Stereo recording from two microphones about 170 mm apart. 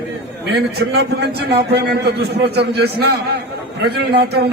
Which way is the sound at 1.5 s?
75° right (ahead or behind).